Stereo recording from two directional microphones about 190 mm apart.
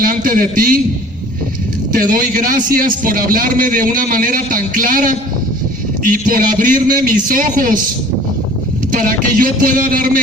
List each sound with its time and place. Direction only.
0.0 s a man's voice: 45° right (ahead or behind)
1.9 s a man's voice: 50° right (ahead or behind)
8.9 s a man's voice: 45° right (ahead or behind)